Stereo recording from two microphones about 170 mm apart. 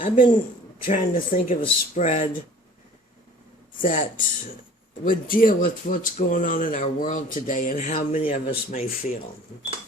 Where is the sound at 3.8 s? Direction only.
50° left (ahead or behind).